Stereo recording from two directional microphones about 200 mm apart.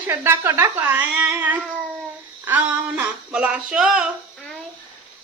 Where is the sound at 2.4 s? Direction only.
10° right (ahead or behind).